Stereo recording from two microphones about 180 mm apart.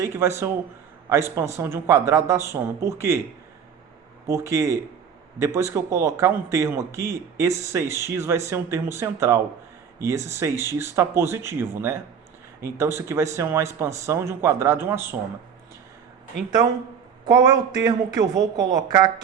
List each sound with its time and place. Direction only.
0.0 s speech: 15° right (ahead or behind)
4.3 s speech: 15° right (ahead or behind)
17.2 s a woman's voice: 20° right (ahead or behind)